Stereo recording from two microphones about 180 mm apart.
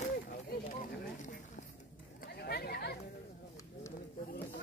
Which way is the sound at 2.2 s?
60° left (ahead or behind).